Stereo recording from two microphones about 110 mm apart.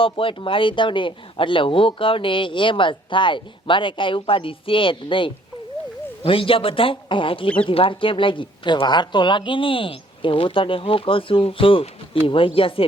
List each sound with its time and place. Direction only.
0.0 s speech: 55° left (ahead or behind)